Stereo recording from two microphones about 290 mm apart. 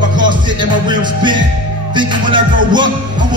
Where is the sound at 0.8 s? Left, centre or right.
Centre.